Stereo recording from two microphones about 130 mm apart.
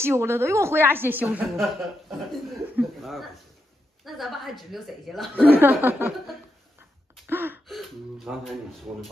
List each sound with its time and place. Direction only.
0.0 s a woman's voice: 20° right (ahead or behind)
1.6 s a woman's voice: centre (ahead or behind)
5.5 s chuckle: 15° right (ahead or behind)
7.2 s gasp: 15° right (ahead or behind)
7.6 s a woman's voice: centre (ahead or behind)